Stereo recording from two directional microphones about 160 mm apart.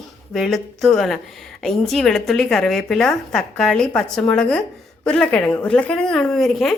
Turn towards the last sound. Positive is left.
turn(degrees=0)  # may be behind; listen again after turning